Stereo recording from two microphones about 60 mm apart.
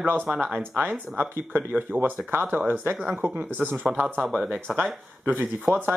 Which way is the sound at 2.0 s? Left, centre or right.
Right.